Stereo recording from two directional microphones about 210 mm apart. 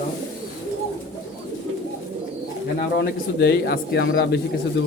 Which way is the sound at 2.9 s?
50° left (ahead or behind).